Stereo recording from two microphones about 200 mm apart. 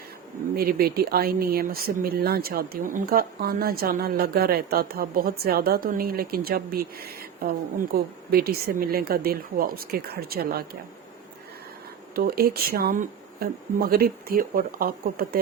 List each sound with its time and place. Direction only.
0.5 s speech: 50° right (ahead or behind)
12.1 s speech: 50° right (ahead or behind)